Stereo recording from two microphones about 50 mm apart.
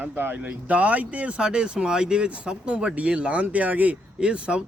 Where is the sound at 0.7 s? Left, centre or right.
Right.